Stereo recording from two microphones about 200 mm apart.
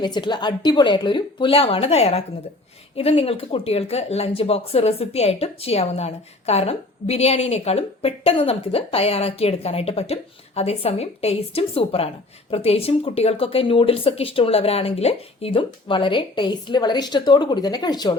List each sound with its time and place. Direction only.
0.0 s speech: 20° left (ahead or behind)